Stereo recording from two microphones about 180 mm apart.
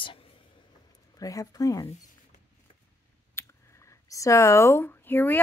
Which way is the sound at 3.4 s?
15° left (ahead or behind).